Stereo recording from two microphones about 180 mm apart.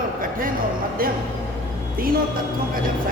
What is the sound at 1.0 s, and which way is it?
Speech, 55° right (ahead or behind).